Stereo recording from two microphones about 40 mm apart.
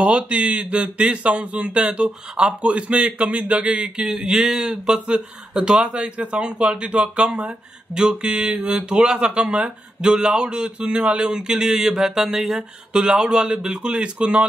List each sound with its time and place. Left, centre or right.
0.0 s speech: right
7.3 s speech: centre
11.2 s mantra: centre
12.9 s speech: right